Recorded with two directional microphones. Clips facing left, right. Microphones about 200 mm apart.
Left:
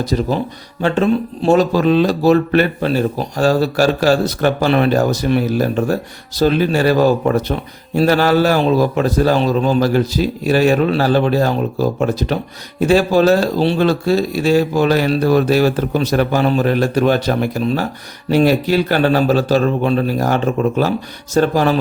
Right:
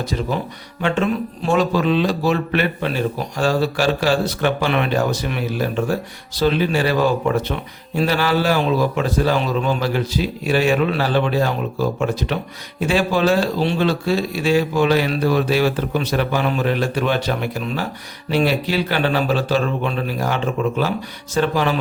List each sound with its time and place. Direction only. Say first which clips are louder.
0.0 s a man's voice: left 5 dB; 40° left (ahead or behind)